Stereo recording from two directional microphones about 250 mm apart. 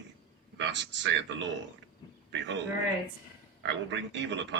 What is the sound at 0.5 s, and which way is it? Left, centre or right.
A man's voice, right.